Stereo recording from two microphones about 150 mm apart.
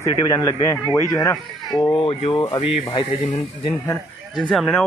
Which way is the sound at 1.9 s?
40° left (ahead or behind).